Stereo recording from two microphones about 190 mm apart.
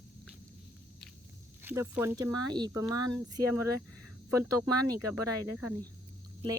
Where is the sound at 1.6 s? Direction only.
10° right (ahead or behind).